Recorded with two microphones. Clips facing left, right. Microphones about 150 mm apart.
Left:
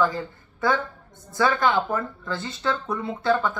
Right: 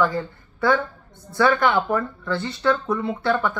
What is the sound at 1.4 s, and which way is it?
Speech, 20° left (ahead or behind).